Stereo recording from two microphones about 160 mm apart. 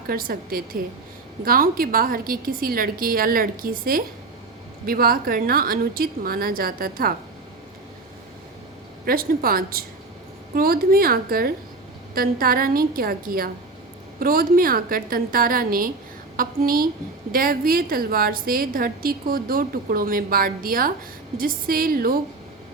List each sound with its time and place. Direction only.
0.1 s a woman's voice: 65° right (ahead or behind)
9.0 s a woman's voice: 65° right (ahead or behind)